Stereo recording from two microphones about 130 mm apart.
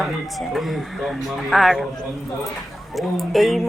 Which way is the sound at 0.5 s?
Centre (ahead or behind).